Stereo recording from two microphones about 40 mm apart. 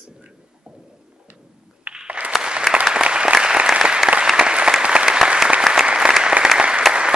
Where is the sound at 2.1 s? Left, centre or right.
Right.